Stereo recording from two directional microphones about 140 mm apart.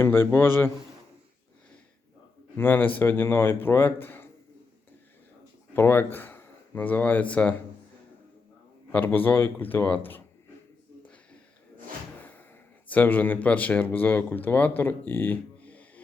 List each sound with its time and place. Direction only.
0.0 s speech: 15° left (ahead or behind)
2.6 s speech: 15° left (ahead or behind)
5.7 s speech: 15° left (ahead or behind)
8.9 s speech: 10° left (ahead or behind)
12.2 s slam: 15° left (ahead or behind)
12.9 s speech: 10° left (ahead or behind)